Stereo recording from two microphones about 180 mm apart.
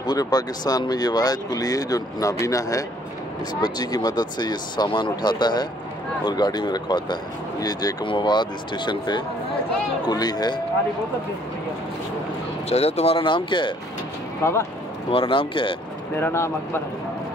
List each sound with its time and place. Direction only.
0.0 s speech: 20° left (ahead or behind)
12.6 s speech: 35° left (ahead or behind)
14.4 s speech: 15° left (ahead or behind)
15.0 s speech: 30° left (ahead or behind)
16.2 s speech: 15° left (ahead or behind)